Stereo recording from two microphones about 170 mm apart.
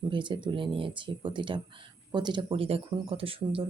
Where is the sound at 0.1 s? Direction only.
30° right (ahead or behind).